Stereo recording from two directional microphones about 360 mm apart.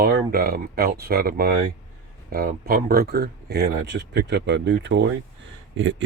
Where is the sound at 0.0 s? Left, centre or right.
Right.